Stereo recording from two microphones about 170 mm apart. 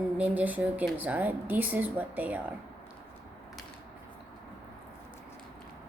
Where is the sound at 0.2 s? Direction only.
10° right (ahead or behind).